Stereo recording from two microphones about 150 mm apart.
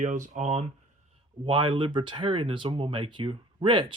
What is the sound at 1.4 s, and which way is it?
Speech, 35° right (ahead or behind).